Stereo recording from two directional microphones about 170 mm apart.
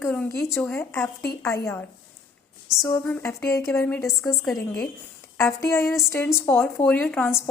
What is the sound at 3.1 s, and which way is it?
Speech, 15° left (ahead or behind).